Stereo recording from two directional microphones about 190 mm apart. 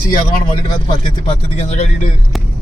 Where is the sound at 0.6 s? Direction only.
30° left (ahead or behind).